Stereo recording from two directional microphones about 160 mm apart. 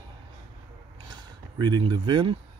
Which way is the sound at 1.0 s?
30° right (ahead or behind).